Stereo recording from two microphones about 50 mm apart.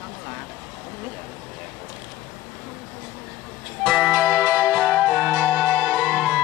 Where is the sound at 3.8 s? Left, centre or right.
Right.